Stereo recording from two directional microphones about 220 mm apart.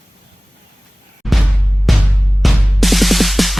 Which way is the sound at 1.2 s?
Centre (ahead or behind).